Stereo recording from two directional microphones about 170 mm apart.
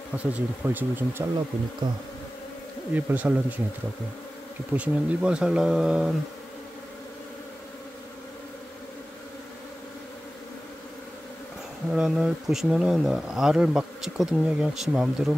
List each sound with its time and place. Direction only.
0.1 s speech: 10° right (ahead or behind)
1.8 s bee: 25° right (ahead or behind)
2.9 s speech: 10° right (ahead or behind)
4.7 s speech: 10° right (ahead or behind)
11.9 s speech: 5° right (ahead or behind)